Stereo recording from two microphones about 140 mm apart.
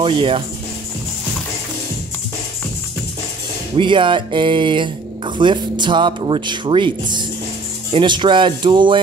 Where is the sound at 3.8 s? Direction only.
35° right (ahead or behind).